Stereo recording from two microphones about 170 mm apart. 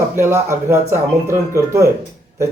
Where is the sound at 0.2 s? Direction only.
15° right (ahead or behind).